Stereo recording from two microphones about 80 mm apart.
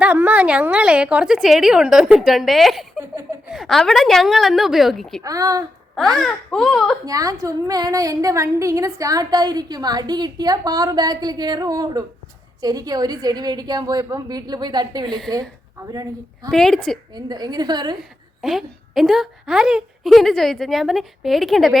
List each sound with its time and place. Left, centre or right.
0.0 s a woman's voice: centre
5.2 s a woman's voice: right
6.0 s a woman's voice: centre
7.0 s a woman's voice: right
15.9 s a woman's voice: right
16.5 s a woman's voice: centre
17.2 s a woman's voice: right
18.4 s a woman's voice: centre
20.1 s a woman's voice: centre